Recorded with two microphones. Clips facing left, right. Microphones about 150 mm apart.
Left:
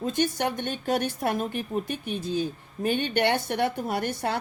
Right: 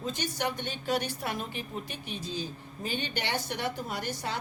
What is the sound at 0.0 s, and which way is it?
A woman's voice, 50° left (ahead or behind).